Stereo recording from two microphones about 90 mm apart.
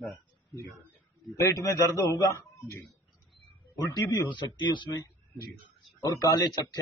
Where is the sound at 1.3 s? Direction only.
40° left (ahead or behind).